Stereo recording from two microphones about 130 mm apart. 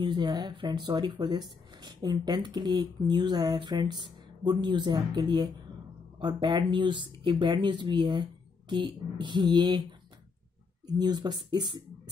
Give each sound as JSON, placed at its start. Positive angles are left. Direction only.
{"t": 0.0, "sound": "speech", "side_deg": -35}
{"t": 11.0, "sound": "speech", "side_deg": -35}